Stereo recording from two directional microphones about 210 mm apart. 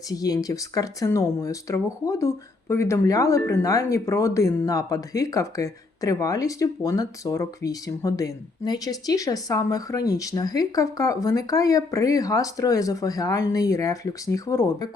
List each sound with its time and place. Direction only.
0.1 s speech: 15° left (ahead or behind)